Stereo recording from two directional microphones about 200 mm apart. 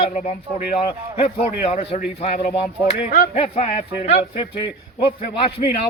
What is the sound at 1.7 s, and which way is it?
Speech, 30° left (ahead or behind).